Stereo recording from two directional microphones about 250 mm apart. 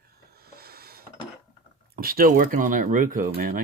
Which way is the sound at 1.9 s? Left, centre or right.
Right.